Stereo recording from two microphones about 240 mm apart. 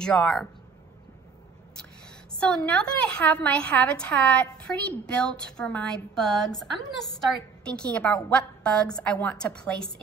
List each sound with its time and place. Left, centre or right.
0.0 s a woman's voice: centre
2.6 s a woman's voice: centre